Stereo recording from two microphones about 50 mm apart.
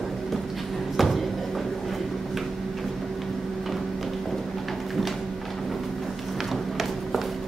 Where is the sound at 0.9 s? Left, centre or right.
Centre.